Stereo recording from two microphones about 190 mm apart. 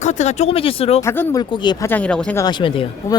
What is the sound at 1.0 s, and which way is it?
Speech, 15° left (ahead or behind).